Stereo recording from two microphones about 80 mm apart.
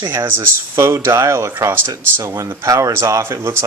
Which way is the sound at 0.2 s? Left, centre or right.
Right.